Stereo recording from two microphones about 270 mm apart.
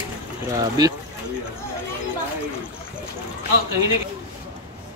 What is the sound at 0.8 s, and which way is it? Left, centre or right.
Speech, centre.